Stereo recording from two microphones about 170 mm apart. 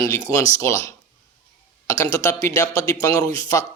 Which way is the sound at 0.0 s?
20° left (ahead or behind).